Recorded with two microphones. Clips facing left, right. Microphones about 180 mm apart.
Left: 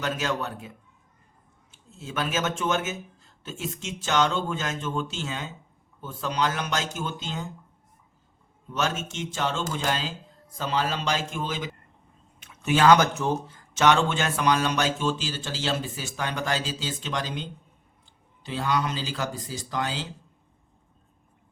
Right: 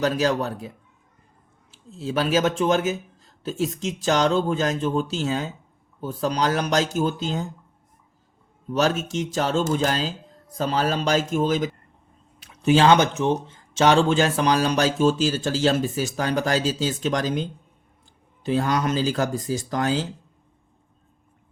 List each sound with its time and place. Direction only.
0.0 s speech: 35° right (ahead or behind)
1.7 s speech: 30° right (ahead or behind)
8.7 s speech: 35° right (ahead or behind)
18.4 s speech: 45° right (ahead or behind)